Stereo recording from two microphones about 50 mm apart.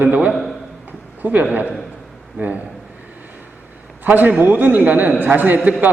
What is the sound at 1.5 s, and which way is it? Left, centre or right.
A man's voice, right.